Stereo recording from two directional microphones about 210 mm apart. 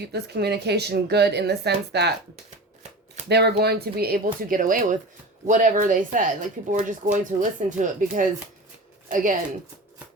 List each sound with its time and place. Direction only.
0.0 s a woman's voice: 50° right (ahead or behind)
3.2 s a woman's voice: 50° right (ahead or behind)